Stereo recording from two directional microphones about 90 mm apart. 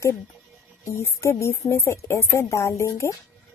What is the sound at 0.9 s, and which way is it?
A woman's voice, 30° left (ahead or behind).